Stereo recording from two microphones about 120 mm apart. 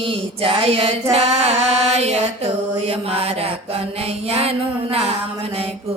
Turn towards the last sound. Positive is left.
turn(degrees=-60)  # may be behind; listen again after turning